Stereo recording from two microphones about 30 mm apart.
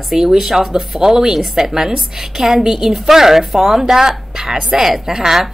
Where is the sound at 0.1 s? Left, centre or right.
Centre.